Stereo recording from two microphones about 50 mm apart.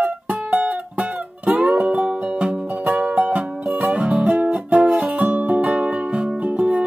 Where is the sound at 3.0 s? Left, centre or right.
Right.